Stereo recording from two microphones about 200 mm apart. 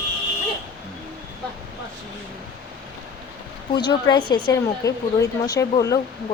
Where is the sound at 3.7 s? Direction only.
20° left (ahead or behind).